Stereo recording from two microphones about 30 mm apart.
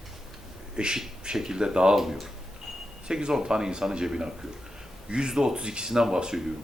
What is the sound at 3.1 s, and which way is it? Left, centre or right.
Speech, right.